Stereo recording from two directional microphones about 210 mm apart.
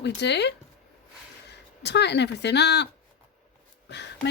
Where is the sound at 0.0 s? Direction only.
55° left (ahead or behind).